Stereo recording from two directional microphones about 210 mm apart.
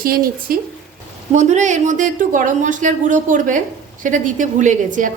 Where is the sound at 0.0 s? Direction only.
45° right (ahead or behind).